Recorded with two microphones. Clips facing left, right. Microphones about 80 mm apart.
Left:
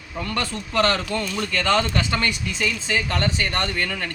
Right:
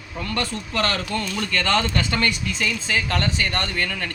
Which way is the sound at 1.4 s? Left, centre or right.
Centre.